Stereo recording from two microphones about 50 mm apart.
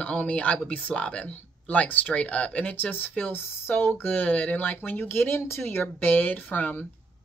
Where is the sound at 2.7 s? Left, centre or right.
Left.